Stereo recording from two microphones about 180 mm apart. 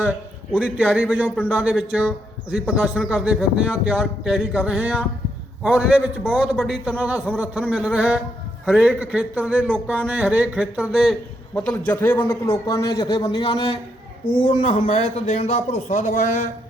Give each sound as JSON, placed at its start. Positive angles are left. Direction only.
{"t": 0.0, "sound": "a man's voice", "side_deg": -5}